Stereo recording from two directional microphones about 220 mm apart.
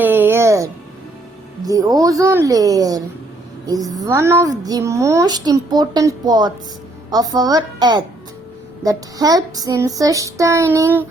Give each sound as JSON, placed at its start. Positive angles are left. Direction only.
{"t": 0.0, "sound": "music", "side_deg": -10}
{"t": 1.6, "sound": "a child's voice", "side_deg": -15}